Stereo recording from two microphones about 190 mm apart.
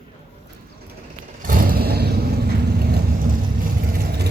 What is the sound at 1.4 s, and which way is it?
Vehicle, 50° right (ahead or behind).